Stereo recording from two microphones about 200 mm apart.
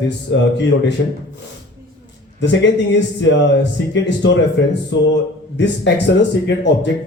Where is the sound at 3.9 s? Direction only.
65° left (ahead or behind).